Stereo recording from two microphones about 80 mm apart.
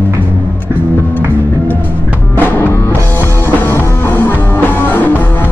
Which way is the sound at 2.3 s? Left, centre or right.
Left.